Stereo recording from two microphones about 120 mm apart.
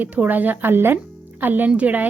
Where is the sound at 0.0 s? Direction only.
15° right (ahead or behind).